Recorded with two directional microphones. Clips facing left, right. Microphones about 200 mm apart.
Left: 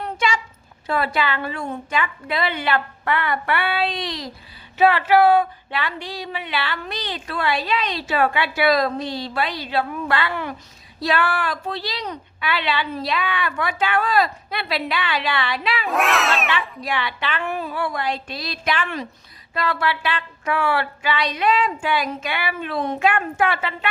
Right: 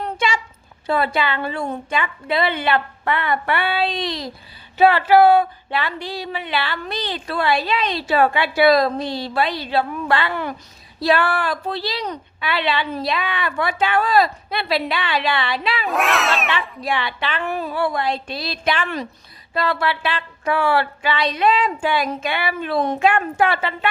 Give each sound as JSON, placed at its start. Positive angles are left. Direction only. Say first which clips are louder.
{"t": 0.9, "sound": "a woman's voice", "louder": "right 2 dB", "side_deg": -25}
{"t": 15.9, "sound": "speech", "louder": "even", "side_deg": 0}
{"t": 16.8, "sound": "a woman's voice", "louder": "right 2 dB", "side_deg": -25}